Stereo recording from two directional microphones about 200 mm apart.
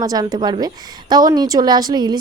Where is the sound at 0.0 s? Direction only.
20° right (ahead or behind).